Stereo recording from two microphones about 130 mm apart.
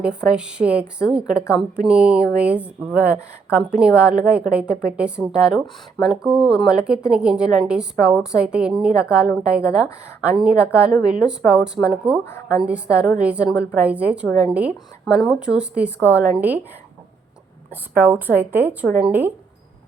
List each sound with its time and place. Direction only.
0.0 s a woman's voice: 5° right (ahead or behind)
12.2 s a woman's voice: 20° left (ahead or behind)
12.5 s a woman's voice: 10° right (ahead or behind)
17.9 s a woman's voice: 15° right (ahead or behind)